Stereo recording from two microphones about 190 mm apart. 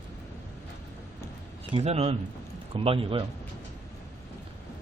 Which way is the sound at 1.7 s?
35° right (ahead or behind).